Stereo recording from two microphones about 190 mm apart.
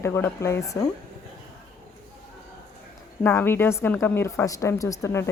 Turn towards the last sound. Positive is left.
turn(degrees=15)  # may be behind; listen again after turning